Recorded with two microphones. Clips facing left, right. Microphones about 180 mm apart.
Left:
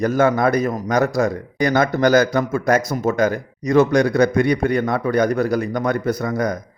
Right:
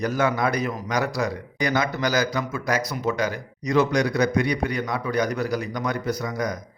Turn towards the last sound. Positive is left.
turn(degrees=55)  # may be behind; listen again after turning